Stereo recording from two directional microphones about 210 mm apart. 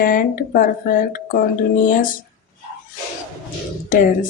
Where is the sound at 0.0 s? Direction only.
40° left (ahead or behind).